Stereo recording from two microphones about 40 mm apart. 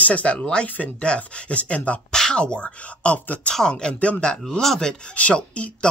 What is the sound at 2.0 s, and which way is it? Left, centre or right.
Speech, centre.